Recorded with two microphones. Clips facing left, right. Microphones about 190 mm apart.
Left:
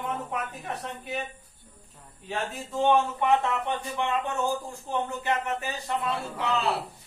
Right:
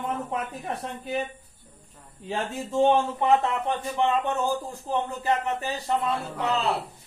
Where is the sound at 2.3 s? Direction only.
30° right (ahead or behind).